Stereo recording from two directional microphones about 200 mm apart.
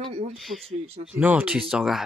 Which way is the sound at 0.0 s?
30° right (ahead or behind).